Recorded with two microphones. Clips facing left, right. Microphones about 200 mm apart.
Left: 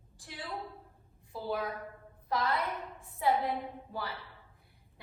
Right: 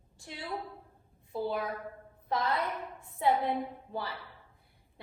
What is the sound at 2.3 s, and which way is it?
A woman's voice, 25° right (ahead or behind).